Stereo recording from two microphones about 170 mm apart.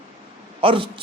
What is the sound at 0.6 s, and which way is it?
Speech, 30° right (ahead or behind).